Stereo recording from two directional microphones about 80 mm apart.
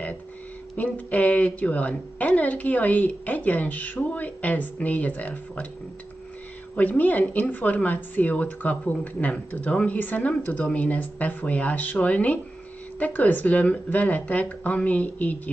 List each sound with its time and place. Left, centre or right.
0.7 s a woman's voice: left
6.7 s a woman's voice: left